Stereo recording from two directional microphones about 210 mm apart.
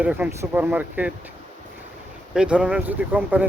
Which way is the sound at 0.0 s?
10° right (ahead or behind).